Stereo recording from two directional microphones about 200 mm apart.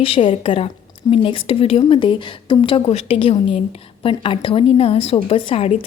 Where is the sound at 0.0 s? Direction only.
25° left (ahead or behind).